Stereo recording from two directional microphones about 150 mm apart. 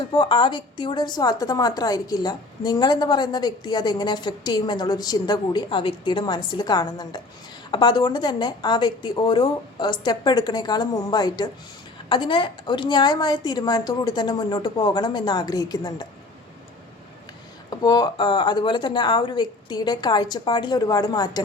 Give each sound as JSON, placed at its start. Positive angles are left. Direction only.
{"t": 0.1, "sound": "a woman's voice", "side_deg": 30}
{"t": 17.7, "sound": "a woman's voice", "side_deg": 30}